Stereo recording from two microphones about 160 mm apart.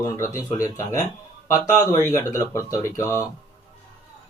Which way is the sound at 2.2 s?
15° left (ahead or behind).